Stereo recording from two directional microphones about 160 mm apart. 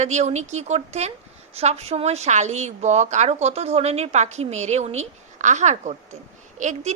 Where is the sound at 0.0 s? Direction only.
45° right (ahead or behind).